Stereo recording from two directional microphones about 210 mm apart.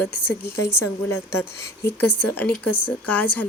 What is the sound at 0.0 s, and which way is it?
Speech, 10° left (ahead or behind).